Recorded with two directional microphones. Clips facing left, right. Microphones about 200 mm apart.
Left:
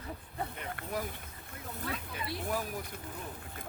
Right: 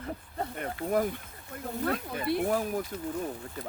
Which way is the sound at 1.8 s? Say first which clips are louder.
Right 9 dB; 55° right (ahead or behind).